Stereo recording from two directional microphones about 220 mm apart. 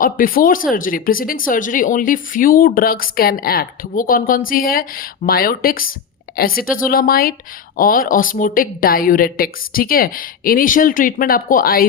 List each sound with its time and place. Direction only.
0.0 s speech: 40° left (ahead or behind)